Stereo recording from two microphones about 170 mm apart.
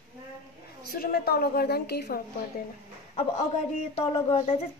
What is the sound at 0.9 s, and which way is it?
Speech, 65° left (ahead or behind).